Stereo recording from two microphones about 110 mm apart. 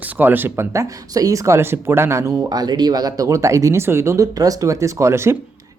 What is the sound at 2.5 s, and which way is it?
Speech, 35° right (ahead or behind).